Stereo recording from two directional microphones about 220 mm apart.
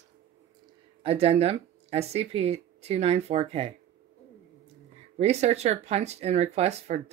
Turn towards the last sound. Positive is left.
turn(degrees=-30)  # may be behind; listen again after turning